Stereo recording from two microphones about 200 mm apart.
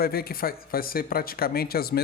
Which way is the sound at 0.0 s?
50° left (ahead or behind).